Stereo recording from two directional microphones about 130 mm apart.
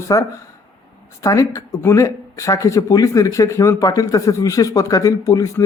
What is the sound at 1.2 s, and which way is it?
Speech, 25° left (ahead or behind).